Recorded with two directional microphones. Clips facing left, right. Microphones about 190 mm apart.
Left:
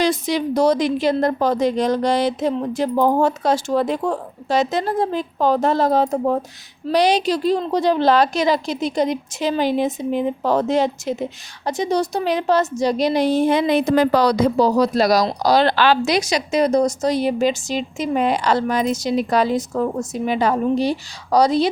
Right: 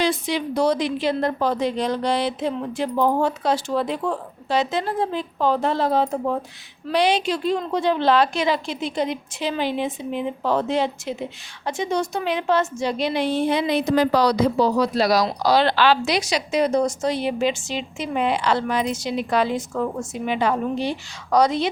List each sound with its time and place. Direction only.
0.0 s a woman's voice: 40° left (ahead or behind)